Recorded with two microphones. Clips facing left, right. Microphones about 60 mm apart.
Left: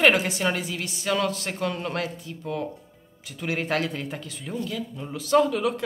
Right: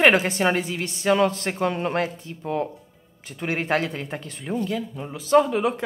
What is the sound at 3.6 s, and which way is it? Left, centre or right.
A woman's voice, right.